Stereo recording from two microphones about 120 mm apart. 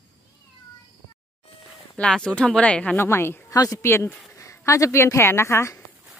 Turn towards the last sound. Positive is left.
turn(degrees=20)  # may be behind; listen again after turning